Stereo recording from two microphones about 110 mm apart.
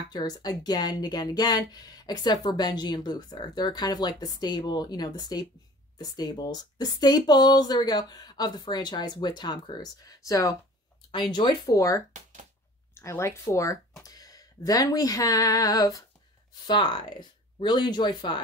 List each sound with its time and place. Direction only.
0.1 s speech: 35° left (ahead or behind)
11.1 s speech: 45° left (ahead or behind)
11.7 s speech: 30° left (ahead or behind)
14.0 s a sound: 35° left (ahead or behind)
16.6 s speech: 45° left (ahead or behind)